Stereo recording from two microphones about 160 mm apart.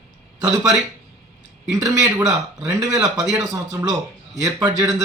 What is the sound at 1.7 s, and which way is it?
A man's voice, 20° right (ahead or behind).